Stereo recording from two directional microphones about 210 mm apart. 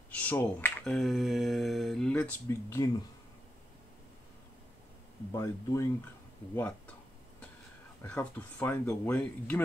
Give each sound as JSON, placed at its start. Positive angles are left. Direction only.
{"t": 0.1, "sound": "speech", "side_deg": 10}
{"t": 5.3, "sound": "speech", "side_deg": 15}
{"t": 8.0, "sound": "speech", "side_deg": 5}